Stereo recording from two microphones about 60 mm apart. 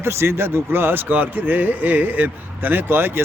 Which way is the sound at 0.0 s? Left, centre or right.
Right.